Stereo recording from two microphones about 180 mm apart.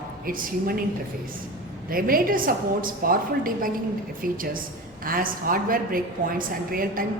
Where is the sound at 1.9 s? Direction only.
55° right (ahead or behind).